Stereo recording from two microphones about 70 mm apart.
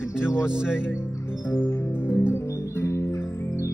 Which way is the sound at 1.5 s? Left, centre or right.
Left.